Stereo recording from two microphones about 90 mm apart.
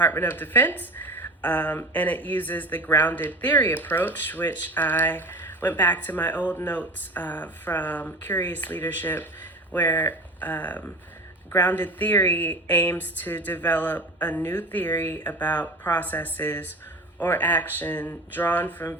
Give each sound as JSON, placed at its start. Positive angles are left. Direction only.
{"t": 0.0, "sound": "a woman's voice", "side_deg": 20}